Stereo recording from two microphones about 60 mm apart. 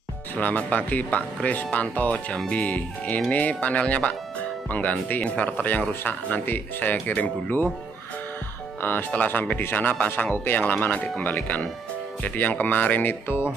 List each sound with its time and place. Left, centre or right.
0.4 s speech: left
8.8 s speech: left